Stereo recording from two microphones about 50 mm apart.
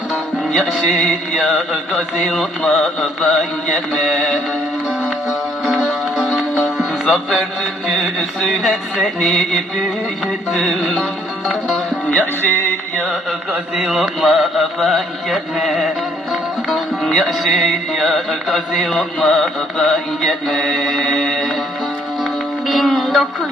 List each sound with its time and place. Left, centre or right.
0.1 s music: centre
5.9 s music: centre
12.0 s music: left
12.4 s music: left
13.7 s music: centre
22.2 s music: centre